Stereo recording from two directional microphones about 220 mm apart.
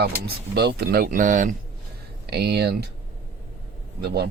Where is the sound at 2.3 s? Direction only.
45° right (ahead or behind).